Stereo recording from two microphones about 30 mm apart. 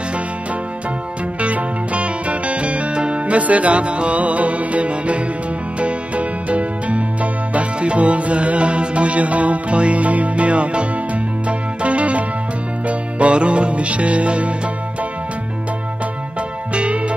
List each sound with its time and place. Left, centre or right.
1.4 s music: right
3.3 s music: right
16.7 s music: right